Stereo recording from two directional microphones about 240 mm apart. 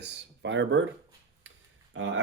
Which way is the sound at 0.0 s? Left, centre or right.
Right.